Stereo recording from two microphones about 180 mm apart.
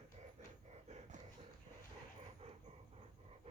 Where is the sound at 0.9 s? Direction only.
40° right (ahead or behind).